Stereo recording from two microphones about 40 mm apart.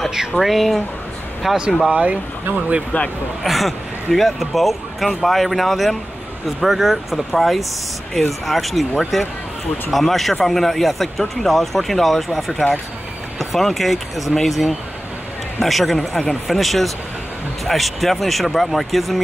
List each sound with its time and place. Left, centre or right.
0.4 s speech: centre
1.4 s speech: centre
1.9 s speech: right
3.4 s speech: centre